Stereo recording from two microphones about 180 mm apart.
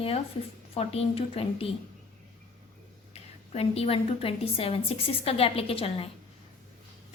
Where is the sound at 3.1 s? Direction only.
35° left (ahead or behind).